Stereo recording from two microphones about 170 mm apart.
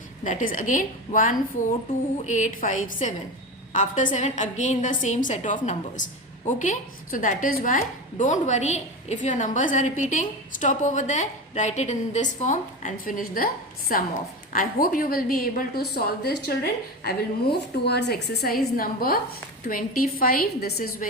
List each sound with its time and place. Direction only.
0.3 s a woman's voice: 50° left (ahead or behind)
6.6 s a woman's voice: 50° left (ahead or behind)